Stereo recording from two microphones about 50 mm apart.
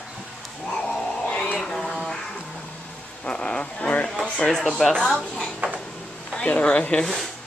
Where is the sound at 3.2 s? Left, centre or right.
Centre.